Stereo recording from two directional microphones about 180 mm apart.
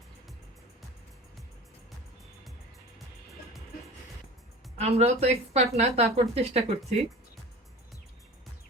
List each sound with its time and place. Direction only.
4.8 s a woman's voice: 35° right (ahead or behind)